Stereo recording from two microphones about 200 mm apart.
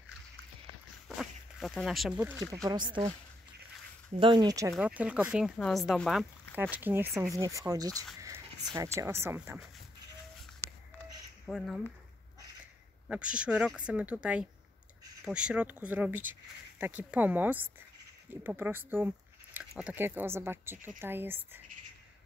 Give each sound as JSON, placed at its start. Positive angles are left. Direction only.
{"t": 1.0, "sound": "zipper", "side_deg": 0}
{"t": 2.5, "sound": "speech", "side_deg": -20}
{"t": 4.2, "sound": "speech", "side_deg": -25}
{"t": 4.7, "sound": "speech", "side_deg": -5}
{"t": 11.4, "sound": "speech", "side_deg": 0}
{"t": 13.1, "sound": "speech", "side_deg": -5}